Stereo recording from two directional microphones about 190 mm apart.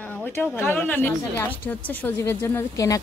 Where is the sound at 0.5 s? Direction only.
10° left (ahead or behind).